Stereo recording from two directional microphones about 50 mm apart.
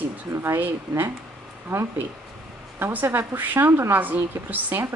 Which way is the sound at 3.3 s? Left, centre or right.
Right.